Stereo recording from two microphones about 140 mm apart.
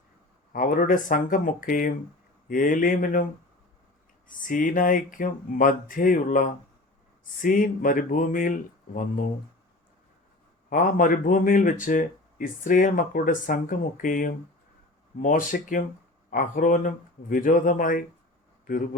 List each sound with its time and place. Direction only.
0.5 s speech: 85° left
4.3 s speech: 75° left (ahead or behind)
10.7 s speech: 70° left (ahead or behind)